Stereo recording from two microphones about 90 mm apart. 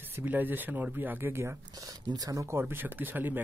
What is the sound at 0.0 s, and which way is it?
A man's voice, 20° right (ahead or behind).